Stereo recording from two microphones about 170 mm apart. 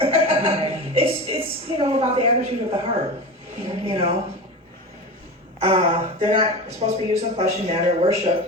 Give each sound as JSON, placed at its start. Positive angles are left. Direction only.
{"t": 0.0, "sound": "chuckle", "side_deg": -35}
{"t": 3.7, "sound": "speech", "side_deg": -35}
{"t": 5.5, "sound": "speech", "side_deg": -35}